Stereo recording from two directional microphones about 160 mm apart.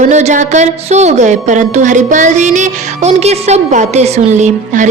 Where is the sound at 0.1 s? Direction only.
45° right (ahead or behind).